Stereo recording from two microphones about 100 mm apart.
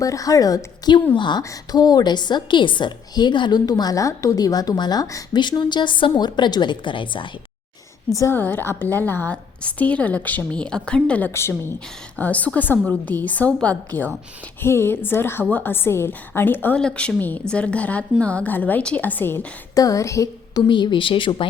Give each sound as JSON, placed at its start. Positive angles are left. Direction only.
{"t": 0.0, "sound": "a woman's voice", "side_deg": 35}
{"t": 8.1, "sound": "a woman's voice", "side_deg": 30}
{"t": 8.4, "sound": "a woman's voice", "side_deg": 20}
{"t": 16.7, "sound": "a woman's voice", "side_deg": 10}
{"t": 19.7, "sound": "a woman's voice", "side_deg": 35}
{"t": 20.6, "sound": "speech", "side_deg": 50}